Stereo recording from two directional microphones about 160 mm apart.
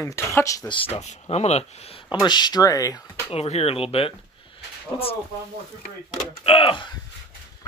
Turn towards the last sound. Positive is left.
turn(degrees=35)  # may be behind; listen again after turning